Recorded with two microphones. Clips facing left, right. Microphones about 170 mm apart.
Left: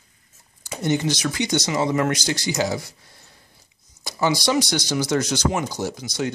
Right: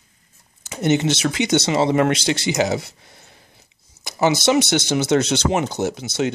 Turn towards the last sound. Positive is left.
turn(degrees=-25)  # may be behind; listen again after turning